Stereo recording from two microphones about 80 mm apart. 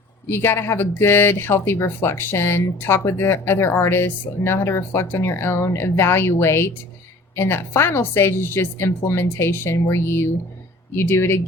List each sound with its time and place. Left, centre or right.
0.3 s speech: left
10.9 s speech: left